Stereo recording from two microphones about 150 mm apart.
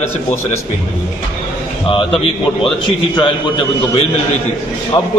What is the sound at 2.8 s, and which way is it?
Speech, 30° left (ahead or behind).